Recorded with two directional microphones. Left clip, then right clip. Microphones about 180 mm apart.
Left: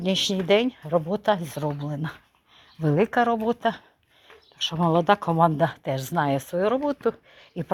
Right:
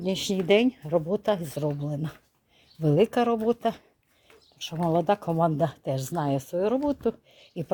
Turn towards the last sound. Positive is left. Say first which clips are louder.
# left 3 dB
turn(degrees=-15)  # may be behind; listen again after turning